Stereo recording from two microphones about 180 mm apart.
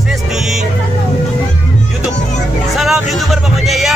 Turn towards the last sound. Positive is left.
turn(degrees=0)  # may be behind; listen again after turning